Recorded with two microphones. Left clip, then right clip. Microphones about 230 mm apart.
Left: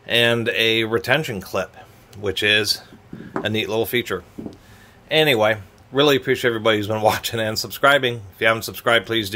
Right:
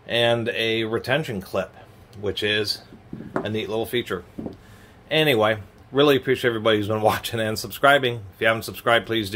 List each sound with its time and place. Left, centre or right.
0.0 s a man's voice: left